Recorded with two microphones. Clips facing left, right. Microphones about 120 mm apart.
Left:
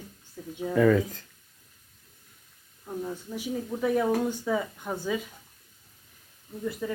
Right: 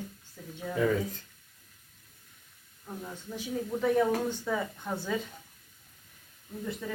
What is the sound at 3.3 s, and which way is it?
Speech, 10° left (ahead or behind).